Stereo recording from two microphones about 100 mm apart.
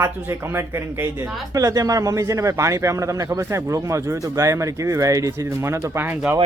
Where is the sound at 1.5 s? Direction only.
35° right (ahead or behind).